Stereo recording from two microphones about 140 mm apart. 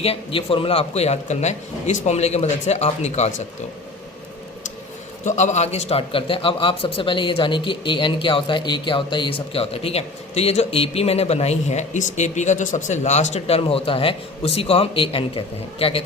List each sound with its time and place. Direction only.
0.0 s a man's voice: 40° left (ahead or behind)
5.2 s a man's voice: 55° left (ahead or behind)